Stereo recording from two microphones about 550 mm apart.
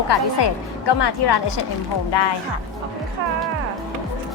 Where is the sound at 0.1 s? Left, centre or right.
Left.